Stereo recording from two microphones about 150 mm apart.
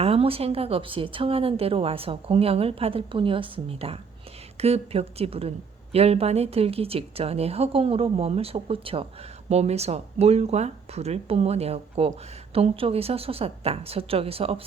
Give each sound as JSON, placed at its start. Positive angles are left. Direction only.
{"t": 0.0, "sound": "a woman's voice", "side_deg": -40}